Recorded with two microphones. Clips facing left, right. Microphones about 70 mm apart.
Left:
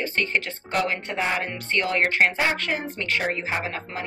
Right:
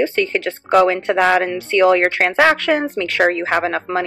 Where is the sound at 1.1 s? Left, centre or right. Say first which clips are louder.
Right 11 dB; right.